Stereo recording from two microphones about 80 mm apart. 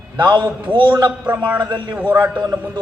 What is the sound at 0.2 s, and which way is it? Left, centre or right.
Speech, right.